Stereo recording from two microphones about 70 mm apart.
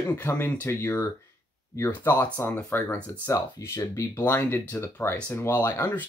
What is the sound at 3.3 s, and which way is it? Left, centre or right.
Speech, left.